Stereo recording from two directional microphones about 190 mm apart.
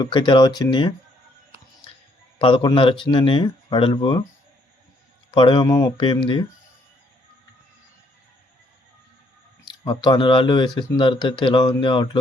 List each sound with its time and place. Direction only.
0.0 s speech: 25° left (ahead or behind)
2.4 s speech: 25° left (ahead or behind)
5.3 s speech: 25° left (ahead or behind)
9.6 s speech: 25° left (ahead or behind)